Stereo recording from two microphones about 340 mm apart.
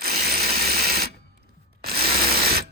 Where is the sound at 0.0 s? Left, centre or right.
Right.